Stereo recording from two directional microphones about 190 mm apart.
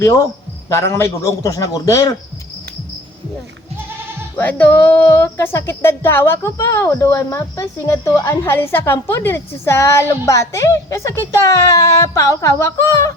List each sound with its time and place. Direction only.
0.7 s music: 15° left (ahead or behind)
4.4 s music: 10° left (ahead or behind)